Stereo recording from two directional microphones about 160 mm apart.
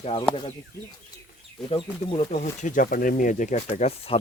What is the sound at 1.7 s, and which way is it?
Speech, 35° left (ahead or behind).